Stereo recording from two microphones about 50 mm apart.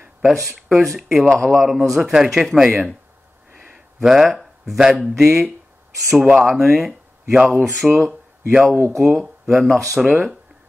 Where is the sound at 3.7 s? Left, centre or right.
Centre.